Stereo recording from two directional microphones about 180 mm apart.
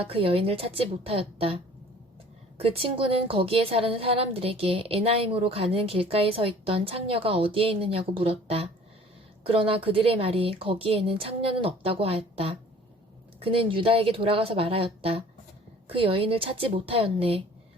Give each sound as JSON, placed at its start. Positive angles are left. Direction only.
{"t": 0.1, "sound": "a woman's voice", "side_deg": -30}